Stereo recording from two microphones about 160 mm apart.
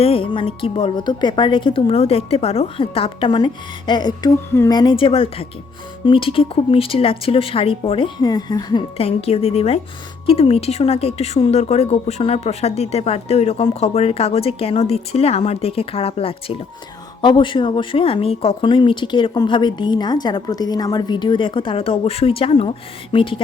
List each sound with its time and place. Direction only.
0.0 s a woman's voice: 35° left (ahead or behind)
9.0 s a woman's voice: 40° left (ahead or behind)